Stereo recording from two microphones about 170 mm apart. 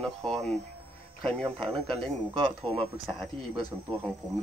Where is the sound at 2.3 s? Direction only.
30° right (ahead or behind).